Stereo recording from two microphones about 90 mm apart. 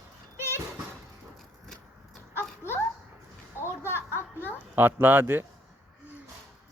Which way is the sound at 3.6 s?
30° left (ahead or behind).